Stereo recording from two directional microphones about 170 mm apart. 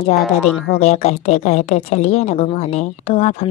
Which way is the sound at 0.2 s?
Centre (ahead or behind).